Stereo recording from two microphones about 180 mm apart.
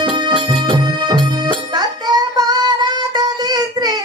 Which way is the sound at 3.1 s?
20° right (ahead or behind).